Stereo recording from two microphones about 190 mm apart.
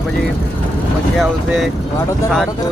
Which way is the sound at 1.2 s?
Centre (ahead or behind).